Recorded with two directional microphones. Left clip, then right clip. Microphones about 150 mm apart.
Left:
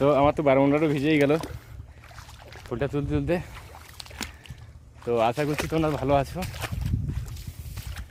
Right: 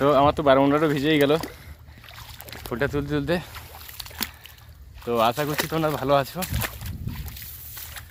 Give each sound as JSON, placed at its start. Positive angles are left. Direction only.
{"t": 0.0, "sound": "speech", "side_deg": 15}
{"t": 2.1, "sound": "boat", "side_deg": -65}
{"t": 2.7, "sound": "speech", "side_deg": 0}
{"t": 3.5, "sound": "a sound", "side_deg": -50}
{"t": 5.0, "sound": "speech", "side_deg": 15}
{"t": 5.5, "sound": "speech", "side_deg": -40}
{"t": 5.9, "sound": "speech", "side_deg": 20}
{"t": 6.4, "sound": "a sound", "side_deg": -40}